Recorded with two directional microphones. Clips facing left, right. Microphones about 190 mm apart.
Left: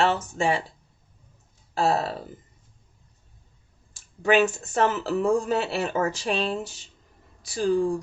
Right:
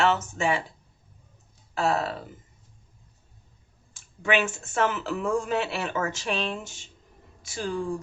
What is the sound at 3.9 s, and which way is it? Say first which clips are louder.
Speech: left 5 dB; 35° left (ahead or behind).